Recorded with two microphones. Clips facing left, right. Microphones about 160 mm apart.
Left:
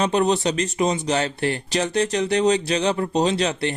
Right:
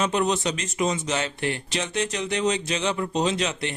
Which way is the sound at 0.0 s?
35° left (ahead or behind).